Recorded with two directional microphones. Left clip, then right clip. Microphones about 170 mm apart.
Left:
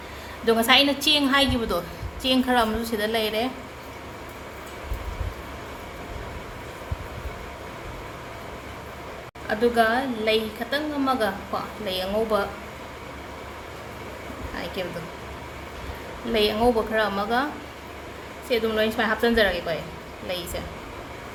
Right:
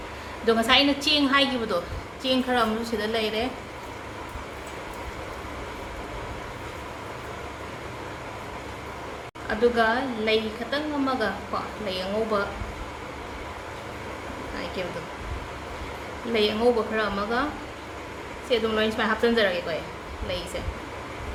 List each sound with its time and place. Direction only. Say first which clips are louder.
0.4 s a woman's voice: left 2 dB; 25° left (ahead or behind)
9.5 s a woman's voice: left 1 dB; 25° left (ahead or behind)
16.3 s a woman's voice: left 1 dB; 25° left (ahead or behind)
18.4 s a woman's voice: left 1 dB; 20° left (ahead or behind)